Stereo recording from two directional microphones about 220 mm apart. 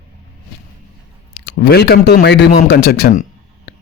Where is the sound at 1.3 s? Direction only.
50° left (ahead or behind).